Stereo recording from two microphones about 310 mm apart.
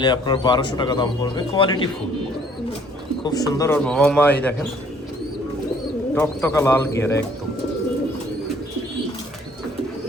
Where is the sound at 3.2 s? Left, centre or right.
Centre.